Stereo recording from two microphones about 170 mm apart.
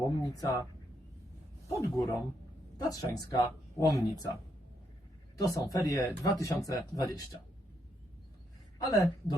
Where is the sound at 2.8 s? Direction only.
20° left (ahead or behind).